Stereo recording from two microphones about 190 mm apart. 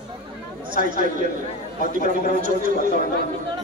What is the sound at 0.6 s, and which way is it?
A man's voice, 45° right (ahead or behind).